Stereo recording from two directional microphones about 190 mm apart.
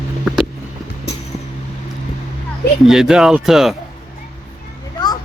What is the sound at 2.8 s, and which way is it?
Speech, 5° right (ahead or behind).